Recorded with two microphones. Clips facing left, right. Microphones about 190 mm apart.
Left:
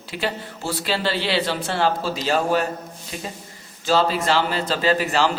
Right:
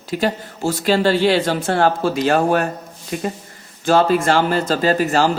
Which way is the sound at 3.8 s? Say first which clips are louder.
Right 5 dB; 55° right (ahead or behind).